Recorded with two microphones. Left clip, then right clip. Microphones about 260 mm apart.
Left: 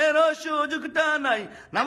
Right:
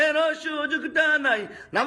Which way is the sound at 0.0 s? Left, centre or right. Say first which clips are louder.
Left 1 dB; centre.